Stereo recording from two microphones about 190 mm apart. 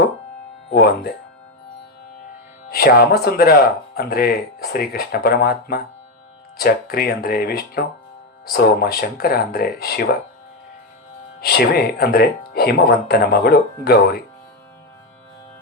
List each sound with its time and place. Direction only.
0.7 s speech: 55° left (ahead or behind)
2.6 s speech: 55° left (ahead or behind)
11.3 s speech: 55° left (ahead or behind)